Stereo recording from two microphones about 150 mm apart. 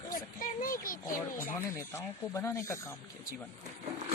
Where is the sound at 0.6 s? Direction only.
65° left (ahead or behind).